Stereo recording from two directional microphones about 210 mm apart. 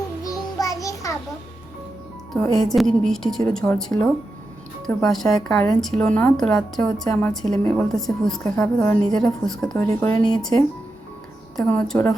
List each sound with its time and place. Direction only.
0.3 s music: 15° left (ahead or behind)
2.3 s a woman's voice: centre (ahead or behind)